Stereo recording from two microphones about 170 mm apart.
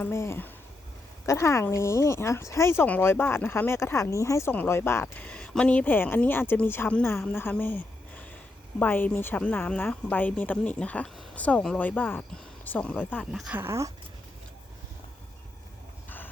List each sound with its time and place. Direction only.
0.0 s speech: 15° left (ahead or behind); by 13.6 s centre (ahead or behind)
13.6 s speech: 15° right (ahead or behind)
16.0 s vehicle: 10° left (ahead or behind)